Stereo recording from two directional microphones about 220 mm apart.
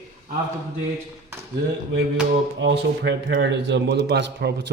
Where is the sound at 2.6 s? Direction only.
55° right (ahead or behind).